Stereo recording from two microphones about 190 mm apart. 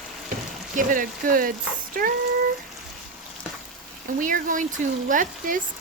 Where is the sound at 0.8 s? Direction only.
45° right (ahead or behind).